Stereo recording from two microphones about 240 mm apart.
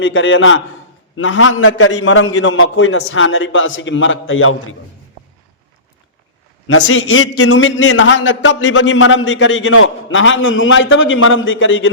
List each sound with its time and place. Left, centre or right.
0.0 s a man's voice: left
6.7 s a man's voice: left